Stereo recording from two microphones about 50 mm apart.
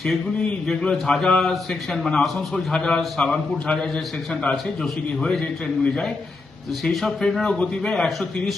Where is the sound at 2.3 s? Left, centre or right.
Centre.